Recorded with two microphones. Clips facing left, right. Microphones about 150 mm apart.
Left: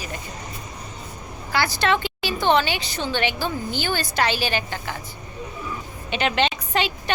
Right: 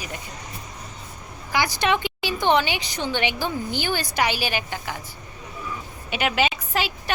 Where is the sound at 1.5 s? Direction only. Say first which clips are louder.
Left 1 dB; 15° right (ahead or behind).